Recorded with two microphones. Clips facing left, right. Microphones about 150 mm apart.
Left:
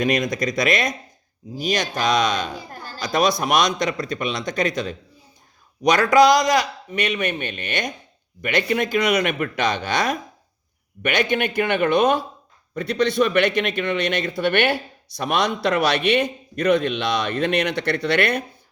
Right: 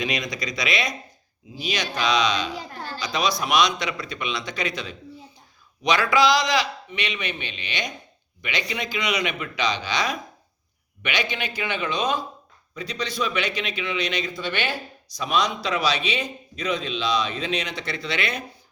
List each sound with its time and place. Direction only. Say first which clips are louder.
0.0 s speech: left 7 dB; 50° left (ahead or behind)